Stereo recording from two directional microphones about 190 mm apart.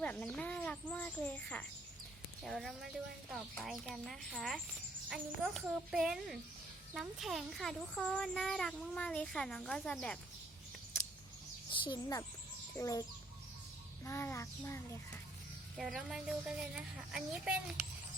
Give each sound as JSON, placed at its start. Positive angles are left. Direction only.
{"t": 0.0, "sound": "a child's voice", "side_deg": 5}
{"t": 11.7, "sound": "a child's voice", "side_deg": 25}
{"t": 15.8, "sound": "a child's voice", "side_deg": 0}